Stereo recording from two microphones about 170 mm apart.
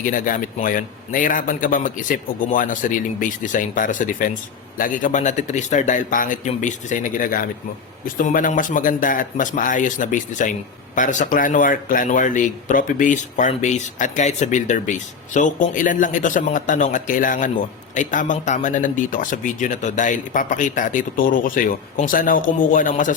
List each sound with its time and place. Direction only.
0.0 s speech: 50° left (ahead or behind)